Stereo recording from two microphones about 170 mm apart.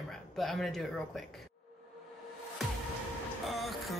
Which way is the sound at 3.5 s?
Centre (ahead or behind).